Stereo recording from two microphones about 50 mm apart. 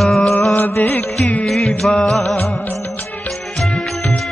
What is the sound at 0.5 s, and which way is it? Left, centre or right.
Music, left.